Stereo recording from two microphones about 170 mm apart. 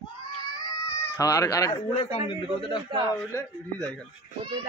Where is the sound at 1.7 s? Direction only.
30° left (ahead or behind).